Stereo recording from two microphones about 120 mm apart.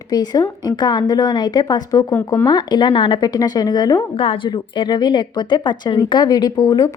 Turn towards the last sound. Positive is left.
turn(degrees=30)  # may be behind; listen again after turning